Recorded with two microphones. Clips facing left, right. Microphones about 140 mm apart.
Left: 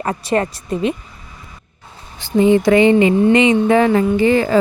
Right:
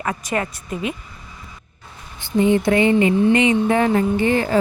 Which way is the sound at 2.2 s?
90° left.